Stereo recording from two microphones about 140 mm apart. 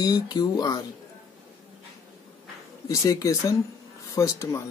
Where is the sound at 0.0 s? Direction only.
30° left (ahead or behind).